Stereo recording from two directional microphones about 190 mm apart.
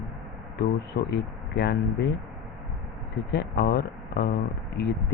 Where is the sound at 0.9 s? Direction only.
50° left (ahead or behind).